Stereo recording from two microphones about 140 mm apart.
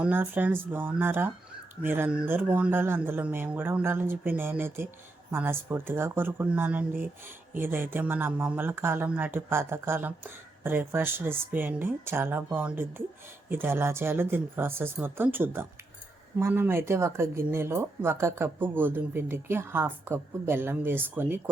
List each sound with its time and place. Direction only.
0.0 s speech: 15° right (ahead or behind)